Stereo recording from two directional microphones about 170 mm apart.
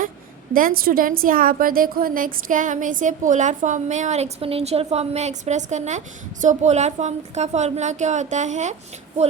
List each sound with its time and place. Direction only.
0.5 s a woman's voice: 55° right (ahead or behind)